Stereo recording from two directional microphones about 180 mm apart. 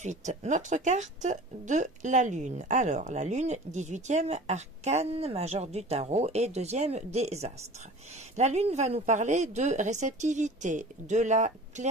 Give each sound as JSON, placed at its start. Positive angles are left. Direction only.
{"t": 0.0, "sound": "speech", "side_deg": -40}